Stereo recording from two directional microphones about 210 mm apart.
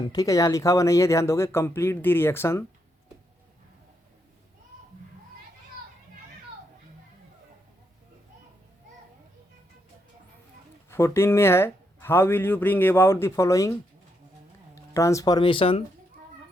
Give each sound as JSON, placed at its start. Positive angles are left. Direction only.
{"t": 0.1, "sound": "speech", "side_deg": 15}
{"t": 10.8, "sound": "speech", "side_deg": 10}
{"t": 14.9, "sound": "speech", "side_deg": 15}